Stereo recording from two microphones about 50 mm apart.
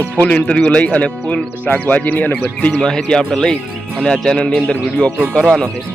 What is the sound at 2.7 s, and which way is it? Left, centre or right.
Speech, centre.